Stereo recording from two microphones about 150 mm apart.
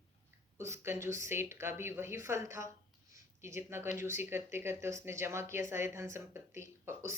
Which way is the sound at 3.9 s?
15° right (ahead or behind).